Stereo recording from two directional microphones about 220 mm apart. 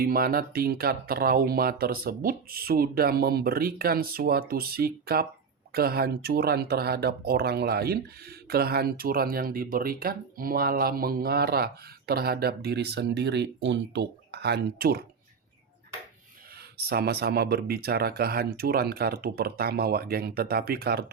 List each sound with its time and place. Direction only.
0.0 s speech: 45° right (ahead or behind)
16.7 s speech: 45° right (ahead or behind)